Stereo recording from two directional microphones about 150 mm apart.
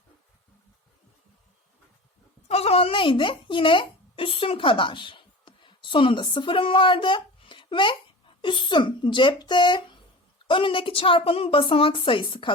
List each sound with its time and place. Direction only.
2.5 s a woman's voice: 45° left (ahead or behind)